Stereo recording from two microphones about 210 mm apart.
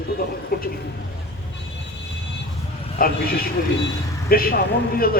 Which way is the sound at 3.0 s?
45° left (ahead or behind).